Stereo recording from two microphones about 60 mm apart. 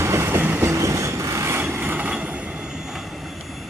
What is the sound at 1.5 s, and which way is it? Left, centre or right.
Vehicle, right.